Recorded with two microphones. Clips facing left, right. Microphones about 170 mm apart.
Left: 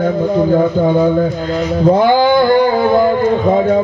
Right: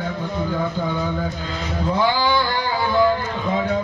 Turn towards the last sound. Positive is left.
turn(degrees=50)  # may be behind; listen again after turning